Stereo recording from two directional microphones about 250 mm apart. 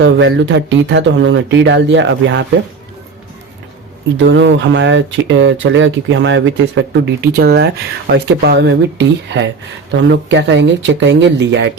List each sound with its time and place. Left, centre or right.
0.0 s speech: right
4.2 s speech: right